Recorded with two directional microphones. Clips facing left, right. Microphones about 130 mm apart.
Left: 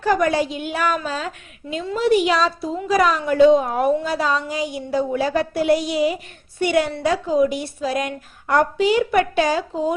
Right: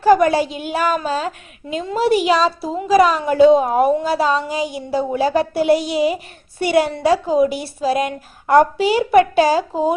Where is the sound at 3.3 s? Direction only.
30° right (ahead or behind).